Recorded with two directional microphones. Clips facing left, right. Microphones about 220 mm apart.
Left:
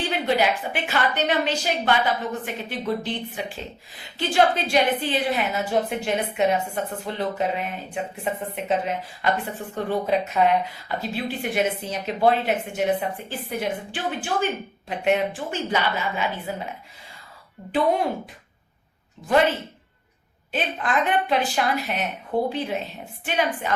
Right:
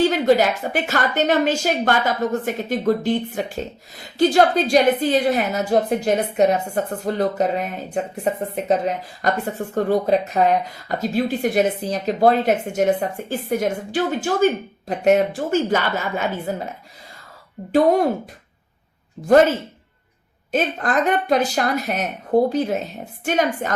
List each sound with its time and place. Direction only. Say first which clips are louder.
0.1 s speech: right 6 dB; 40° right (ahead or behind)
20.5 s a woman's voice: right 5 dB; 45° right (ahead or behind)